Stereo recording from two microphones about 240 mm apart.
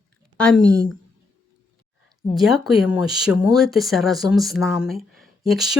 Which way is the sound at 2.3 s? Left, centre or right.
Centre.